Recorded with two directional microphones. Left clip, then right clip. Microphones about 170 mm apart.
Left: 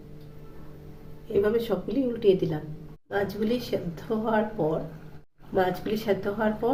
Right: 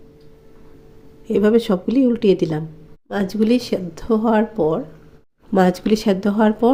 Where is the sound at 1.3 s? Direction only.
65° right (ahead or behind).